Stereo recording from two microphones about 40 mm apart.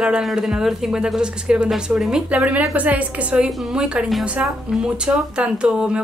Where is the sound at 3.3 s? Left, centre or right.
Right.